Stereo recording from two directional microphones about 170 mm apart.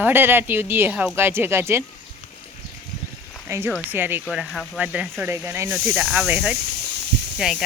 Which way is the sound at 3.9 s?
10° right (ahead or behind).